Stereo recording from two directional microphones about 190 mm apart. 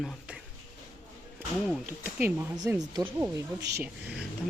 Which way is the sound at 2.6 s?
15° right (ahead or behind).